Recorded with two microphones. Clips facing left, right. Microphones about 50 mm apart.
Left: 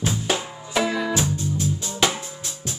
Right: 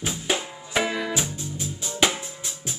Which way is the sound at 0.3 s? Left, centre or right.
Centre.